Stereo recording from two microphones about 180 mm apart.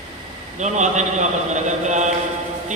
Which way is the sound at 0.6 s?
40° right (ahead or behind).